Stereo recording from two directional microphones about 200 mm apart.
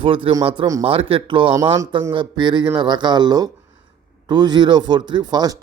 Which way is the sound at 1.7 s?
15° right (ahead or behind).